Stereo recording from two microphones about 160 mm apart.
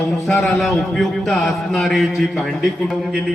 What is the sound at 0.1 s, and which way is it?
A man's voice, centre (ahead or behind).